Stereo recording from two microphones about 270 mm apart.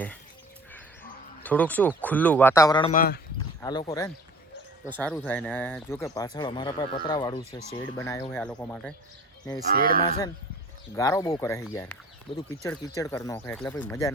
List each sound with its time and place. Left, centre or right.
1.4 s speech: centre
2.9 s speech: left
3.3 s speech: centre
9.7 s speech: right
10.9 s speech: centre